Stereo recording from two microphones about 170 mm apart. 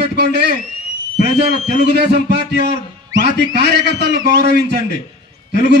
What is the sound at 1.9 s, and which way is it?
Speech, 75° right (ahead or behind).